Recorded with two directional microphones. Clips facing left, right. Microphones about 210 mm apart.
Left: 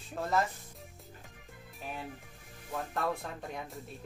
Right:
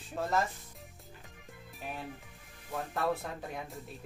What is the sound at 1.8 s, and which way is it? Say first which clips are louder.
Speech: even; centre (ahead or behind).